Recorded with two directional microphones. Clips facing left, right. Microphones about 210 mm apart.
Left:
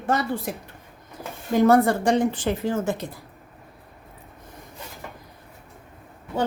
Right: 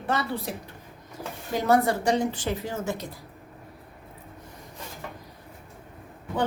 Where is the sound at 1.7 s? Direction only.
50° left (ahead or behind).